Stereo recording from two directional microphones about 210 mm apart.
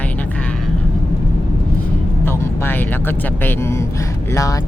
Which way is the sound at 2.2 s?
10° left (ahead or behind).